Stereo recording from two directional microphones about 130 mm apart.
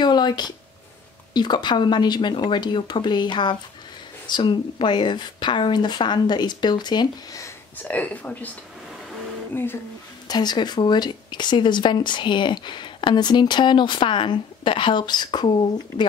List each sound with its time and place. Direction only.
0.0 s a sound: 35° left (ahead or behind)
1.3 s speech: 35° left (ahead or behind)
7.9 s speech: 10° left (ahead or behind)
10.2 s speech: 30° left (ahead or behind)